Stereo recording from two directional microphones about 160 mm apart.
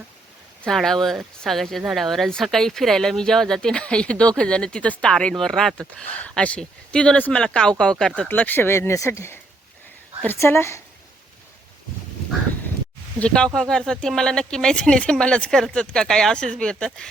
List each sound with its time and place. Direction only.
0.6 s speech: centre (ahead or behind)
13.1 s speech: 5° left (ahead or behind)